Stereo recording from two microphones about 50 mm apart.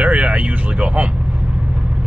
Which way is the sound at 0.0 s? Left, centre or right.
Right.